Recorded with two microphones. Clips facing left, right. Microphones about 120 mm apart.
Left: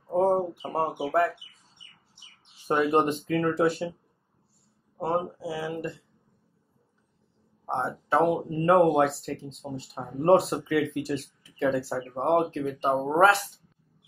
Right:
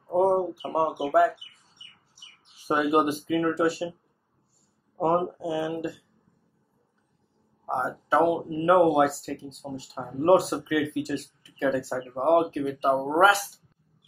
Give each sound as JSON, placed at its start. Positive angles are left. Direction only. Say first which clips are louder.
{"t": 0.1, "sound": "speech", "louder": "right 1 dB", "side_deg": -10}
{"t": 2.7, "sound": "speech", "louder": "even", "side_deg": -10}
{"t": 4.9, "sound": "speech", "louder": "right 4 dB", "side_deg": -25}
{"t": 7.6, "sound": "speech", "louder": "right 1 dB", "side_deg": 0}